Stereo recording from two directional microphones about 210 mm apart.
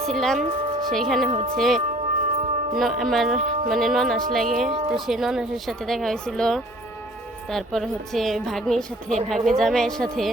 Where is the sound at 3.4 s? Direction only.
40° right (ahead or behind).